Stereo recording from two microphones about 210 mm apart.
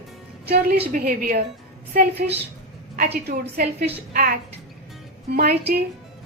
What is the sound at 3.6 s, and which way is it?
Speech, 40° right (ahead or behind).